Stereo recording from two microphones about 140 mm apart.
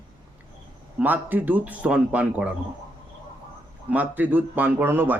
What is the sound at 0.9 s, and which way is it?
Speech, 10° right (ahead or behind).